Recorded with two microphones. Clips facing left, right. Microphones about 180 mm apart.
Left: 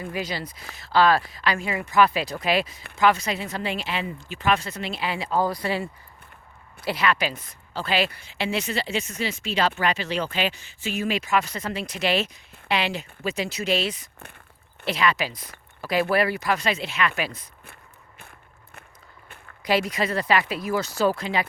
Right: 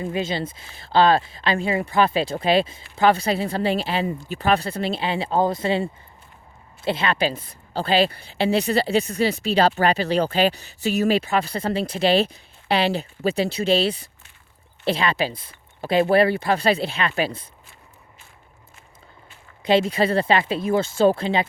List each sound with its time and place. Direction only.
0.0 s speech: 25° right (ahead or behind)
18.2 s walk: 60° left (ahead or behind)
19.6 s speech: 25° right (ahead or behind)